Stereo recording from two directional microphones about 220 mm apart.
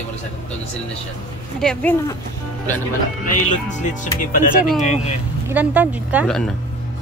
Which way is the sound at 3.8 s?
35° left (ahead or behind).